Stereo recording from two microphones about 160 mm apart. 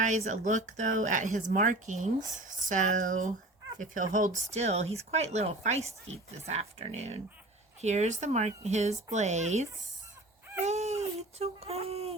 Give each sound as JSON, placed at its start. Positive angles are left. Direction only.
{"t": 0.0, "sound": "speech", "side_deg": -50}
{"t": 10.7, "sound": "baby cry", "side_deg": -45}